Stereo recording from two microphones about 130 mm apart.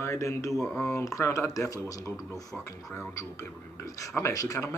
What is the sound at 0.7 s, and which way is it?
Speech, 20° left (ahead or behind).